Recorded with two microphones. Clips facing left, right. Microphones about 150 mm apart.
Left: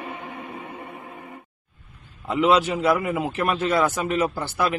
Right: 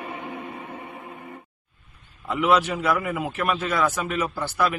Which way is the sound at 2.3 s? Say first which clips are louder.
Left 2 dB; 30° left (ahead or behind).